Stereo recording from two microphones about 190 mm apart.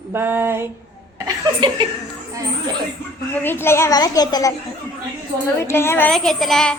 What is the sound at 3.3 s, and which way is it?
A woman's voice, 10° left (ahead or behind).